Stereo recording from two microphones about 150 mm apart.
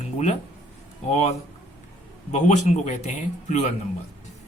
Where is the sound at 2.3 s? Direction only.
50° left (ahead or behind).